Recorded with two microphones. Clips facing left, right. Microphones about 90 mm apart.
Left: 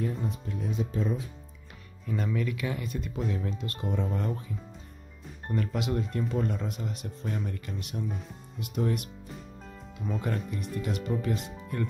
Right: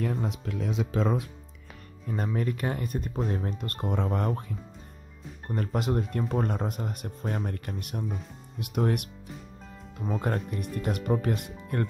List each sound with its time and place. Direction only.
0.0 s speech: 85° right
2.0 s speech: 40° right (ahead or behind); by 4.6 s 55° right (ahead or behind)
5.5 s speech: 40° right (ahead or behind); by 9.1 s 60° right (ahead or behind)
10.2 s speech: 50° right (ahead or behind)